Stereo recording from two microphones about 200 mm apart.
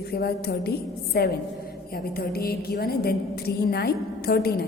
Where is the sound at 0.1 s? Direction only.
50° left (ahead or behind).